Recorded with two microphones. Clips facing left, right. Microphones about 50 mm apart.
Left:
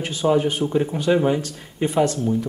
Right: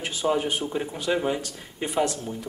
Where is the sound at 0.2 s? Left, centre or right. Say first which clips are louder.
Left 6 dB; centre.